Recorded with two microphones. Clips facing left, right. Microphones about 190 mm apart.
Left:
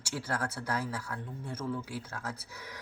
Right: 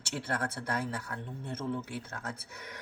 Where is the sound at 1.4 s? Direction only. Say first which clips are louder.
Right 1 dB; 25° right (ahead or behind).